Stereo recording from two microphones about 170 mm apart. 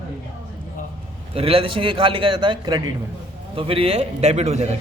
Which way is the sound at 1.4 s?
35° right (ahead or behind).